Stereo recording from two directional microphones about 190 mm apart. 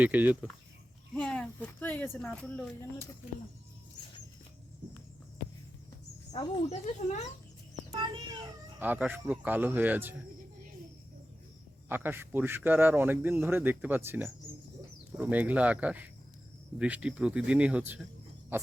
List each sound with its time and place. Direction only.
0.0 s a man's voice: 10° right (ahead or behind)
1.1 s speech: 5° left (ahead or behind)
6.3 s speech: 35° left (ahead or behind)
7.9 s a child's voice: 20° right (ahead or behind)
8.8 s a man's voice: 10° right (ahead or behind)
11.9 s a man's voice: 10° right (ahead or behind)